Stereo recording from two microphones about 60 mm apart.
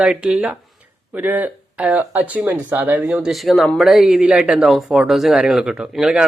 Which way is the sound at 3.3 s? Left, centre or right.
Centre.